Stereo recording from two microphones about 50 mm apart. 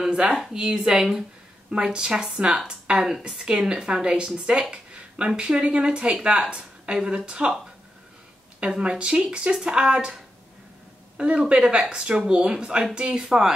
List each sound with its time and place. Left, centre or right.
0.0 s a woman's voice: centre
8.5 s a woman's voice: right